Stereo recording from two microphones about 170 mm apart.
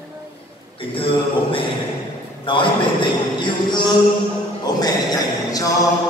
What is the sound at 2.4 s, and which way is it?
A man's voice, 30° left (ahead or behind).